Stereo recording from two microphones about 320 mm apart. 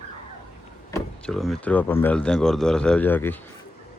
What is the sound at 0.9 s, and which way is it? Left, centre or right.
Speech, centre.